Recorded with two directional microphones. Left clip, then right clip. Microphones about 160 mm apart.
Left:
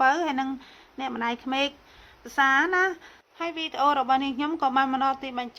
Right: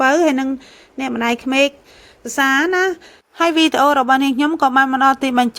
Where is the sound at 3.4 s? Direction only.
50° right (ahead or behind).